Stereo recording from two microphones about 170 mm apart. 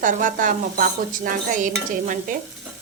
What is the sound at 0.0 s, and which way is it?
Stir, 50° right (ahead or behind).